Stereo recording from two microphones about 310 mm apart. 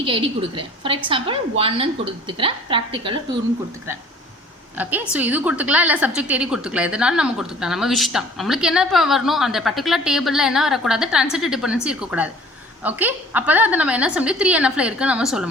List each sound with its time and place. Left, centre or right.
0.0 s a woman's voice: centre
4.8 s a woman's voice: centre